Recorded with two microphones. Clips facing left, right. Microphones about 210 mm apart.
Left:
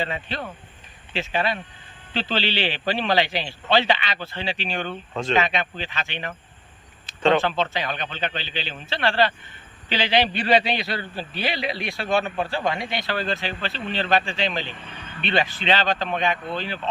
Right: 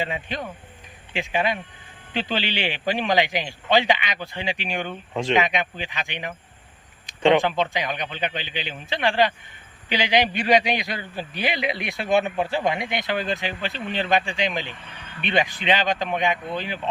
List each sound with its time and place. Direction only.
0.0 s a man's voice: 15° right (ahead or behind)